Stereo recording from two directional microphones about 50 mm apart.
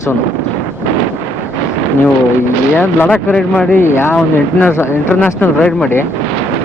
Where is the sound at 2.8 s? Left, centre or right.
Left.